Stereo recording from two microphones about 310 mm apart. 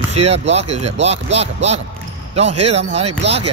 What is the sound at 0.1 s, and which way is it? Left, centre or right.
Speech, centre.